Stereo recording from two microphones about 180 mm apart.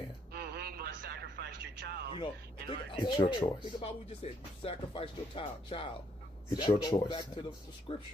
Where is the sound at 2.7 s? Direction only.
25° left (ahead or behind).